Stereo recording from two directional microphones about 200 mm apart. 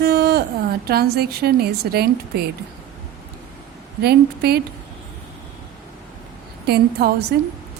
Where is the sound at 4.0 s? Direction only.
55° right (ahead or behind).